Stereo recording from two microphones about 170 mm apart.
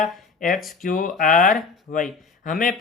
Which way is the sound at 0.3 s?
50° left (ahead or behind).